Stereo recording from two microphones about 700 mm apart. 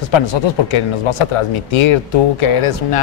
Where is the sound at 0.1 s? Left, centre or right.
Left.